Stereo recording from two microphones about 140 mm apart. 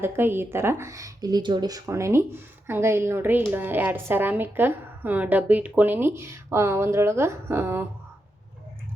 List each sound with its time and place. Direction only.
0.0 s a woman's voice: 15° right (ahead or behind)